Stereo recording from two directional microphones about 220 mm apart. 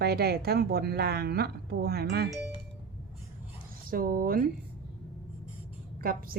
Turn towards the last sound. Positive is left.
turn(degrees=-40)  # may be behind; listen again after turning